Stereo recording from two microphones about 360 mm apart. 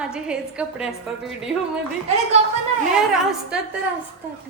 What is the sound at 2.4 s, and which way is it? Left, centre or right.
Speech, centre.